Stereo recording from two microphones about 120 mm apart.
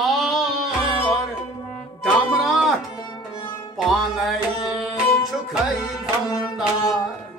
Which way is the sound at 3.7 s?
Centre (ahead or behind).